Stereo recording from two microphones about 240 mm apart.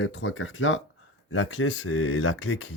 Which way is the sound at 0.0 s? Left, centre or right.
Left.